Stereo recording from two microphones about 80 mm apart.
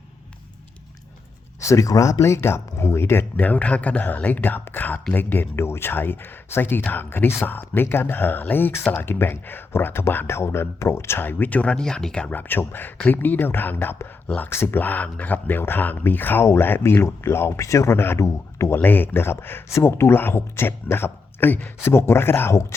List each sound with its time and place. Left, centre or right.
1.6 s speech: left; by 12.3 s centre
12.3 s speech: left